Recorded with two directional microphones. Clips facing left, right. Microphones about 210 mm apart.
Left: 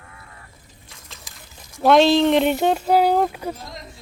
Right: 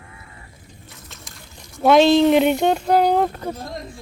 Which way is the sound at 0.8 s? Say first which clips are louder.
Right 1 dB; centre (ahead or behind).